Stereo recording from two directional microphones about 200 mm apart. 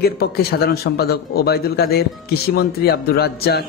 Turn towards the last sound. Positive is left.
turn(degrees=50)  # may be behind; listen again after turning